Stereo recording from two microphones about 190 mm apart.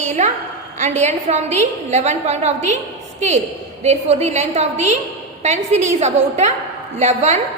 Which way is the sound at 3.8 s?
35° right (ahead or behind).